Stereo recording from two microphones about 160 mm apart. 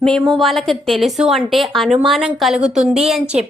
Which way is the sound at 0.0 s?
Centre (ahead or behind).